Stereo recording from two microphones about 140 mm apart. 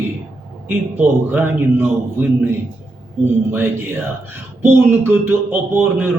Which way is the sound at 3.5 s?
15° right (ahead or behind).